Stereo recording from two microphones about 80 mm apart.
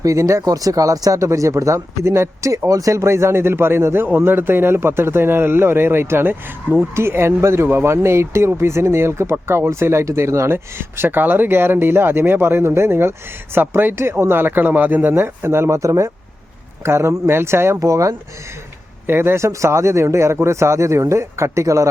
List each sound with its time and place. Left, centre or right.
0.0 s a man's voice: right
19.0 s a man's voice: right